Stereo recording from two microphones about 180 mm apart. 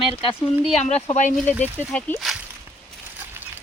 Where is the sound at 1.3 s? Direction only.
Centre (ahead or behind).